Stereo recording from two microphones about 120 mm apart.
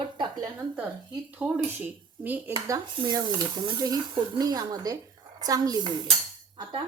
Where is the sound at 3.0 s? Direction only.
35° right (ahead or behind).